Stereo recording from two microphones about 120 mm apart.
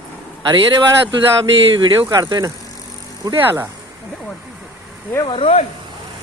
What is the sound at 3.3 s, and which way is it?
Speech, 20° right (ahead or behind).